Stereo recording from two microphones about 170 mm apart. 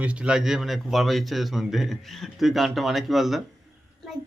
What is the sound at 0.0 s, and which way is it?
A man's voice, 5° right (ahead or behind).